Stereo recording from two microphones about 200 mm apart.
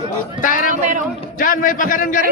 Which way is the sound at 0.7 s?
40° right (ahead or behind).